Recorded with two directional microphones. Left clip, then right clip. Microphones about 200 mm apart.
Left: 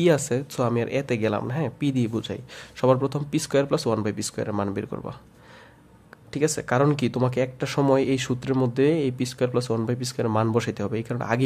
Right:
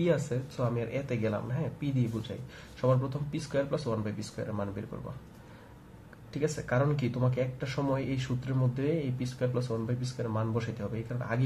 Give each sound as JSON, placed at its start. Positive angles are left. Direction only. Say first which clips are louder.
{"t": 0.0, "sound": "speech", "louder": "left 8 dB", "side_deg": 50}
{"t": 6.3, "sound": "speech", "louder": "left 8 dB", "side_deg": 50}